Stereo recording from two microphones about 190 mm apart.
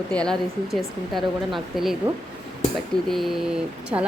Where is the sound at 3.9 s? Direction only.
15° right (ahead or behind).